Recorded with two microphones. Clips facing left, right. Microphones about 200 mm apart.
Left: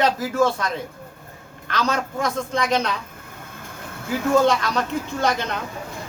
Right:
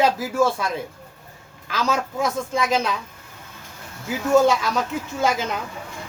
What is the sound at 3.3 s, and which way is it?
Vehicle, 55° left (ahead or behind).